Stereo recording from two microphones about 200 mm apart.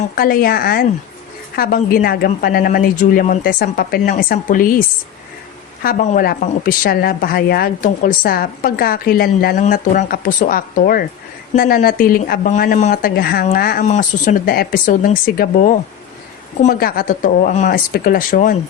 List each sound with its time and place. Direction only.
0.2 s a woman's voice: 45° left (ahead or behind)
5.8 s a woman's voice: 40° left (ahead or behind)
13.8 s a woman's voice: 35° left (ahead or behind)